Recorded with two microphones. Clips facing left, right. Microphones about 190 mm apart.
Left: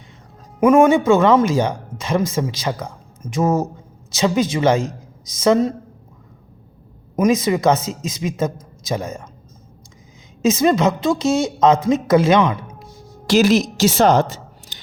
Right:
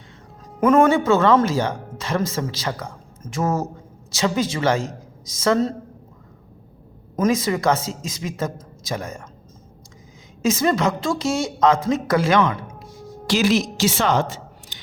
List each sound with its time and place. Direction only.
0.6 s a woman's voice: 15° left (ahead or behind)
7.2 s a woman's voice: 20° left (ahead or behind)
10.4 s a woman's voice: 20° left (ahead or behind)
13.2 s a woman's voice: 45° left (ahead or behind)